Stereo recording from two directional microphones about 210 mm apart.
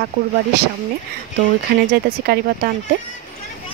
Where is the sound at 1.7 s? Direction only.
45° right (ahead or behind).